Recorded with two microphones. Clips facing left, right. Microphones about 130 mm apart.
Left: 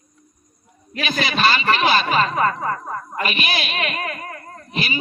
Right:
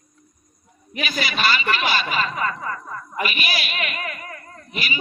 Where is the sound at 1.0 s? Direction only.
40° left (ahead or behind).